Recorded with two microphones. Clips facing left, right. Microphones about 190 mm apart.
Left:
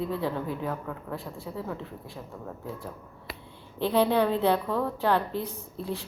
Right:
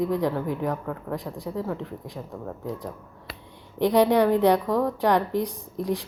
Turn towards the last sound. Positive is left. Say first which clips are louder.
# right 6 dB
turn(degrees=-15)  # may be behind; listen again after turning